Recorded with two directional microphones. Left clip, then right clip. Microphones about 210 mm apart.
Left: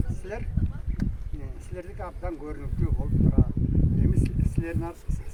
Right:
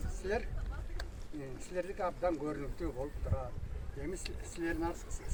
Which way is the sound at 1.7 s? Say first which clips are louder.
Right 2 dB; 15° right (ahead or behind).